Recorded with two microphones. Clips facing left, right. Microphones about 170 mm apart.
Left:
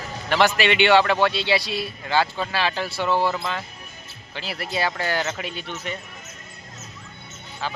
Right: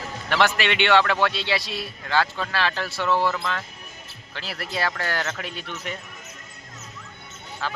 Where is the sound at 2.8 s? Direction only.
30° left (ahead or behind).